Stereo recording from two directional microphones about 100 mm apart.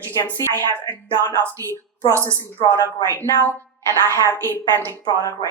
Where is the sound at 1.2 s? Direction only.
25° left (ahead or behind).